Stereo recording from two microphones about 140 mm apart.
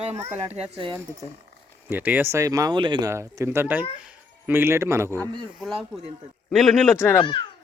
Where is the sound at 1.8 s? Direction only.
15° right (ahead or behind); by 3.0 s 35° right (ahead or behind).